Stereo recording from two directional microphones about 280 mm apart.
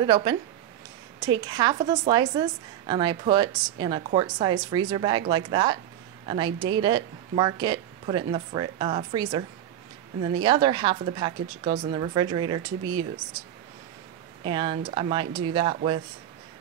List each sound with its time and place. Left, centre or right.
0.0 s a woman's voice: centre
14.4 s a woman's voice: centre